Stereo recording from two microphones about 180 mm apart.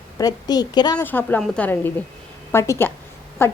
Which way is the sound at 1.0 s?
10° left (ahead or behind).